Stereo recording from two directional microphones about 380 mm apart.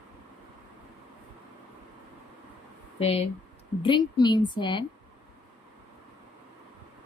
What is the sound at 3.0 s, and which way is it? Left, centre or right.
A woman's voice, centre.